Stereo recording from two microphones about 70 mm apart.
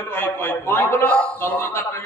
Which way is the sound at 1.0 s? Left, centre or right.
Centre.